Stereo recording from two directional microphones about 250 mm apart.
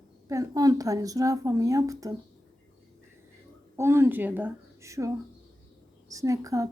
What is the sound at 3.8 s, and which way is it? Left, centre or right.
A woman's voice, centre.